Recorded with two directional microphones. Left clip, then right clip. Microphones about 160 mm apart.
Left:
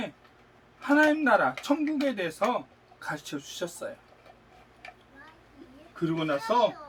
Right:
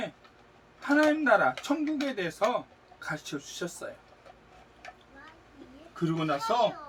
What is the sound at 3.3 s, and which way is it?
Speech, 15° left (ahead or behind).